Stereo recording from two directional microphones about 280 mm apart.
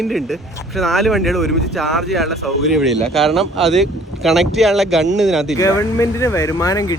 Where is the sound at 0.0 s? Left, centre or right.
Centre.